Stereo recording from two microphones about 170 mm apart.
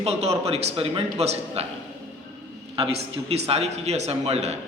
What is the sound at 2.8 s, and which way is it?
A man's voice, 35° right (ahead or behind).